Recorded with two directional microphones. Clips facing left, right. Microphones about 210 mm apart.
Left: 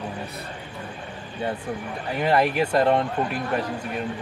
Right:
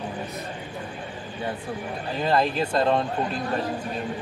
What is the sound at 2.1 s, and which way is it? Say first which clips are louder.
Speech: left 2 dB; 15° left (ahead or behind).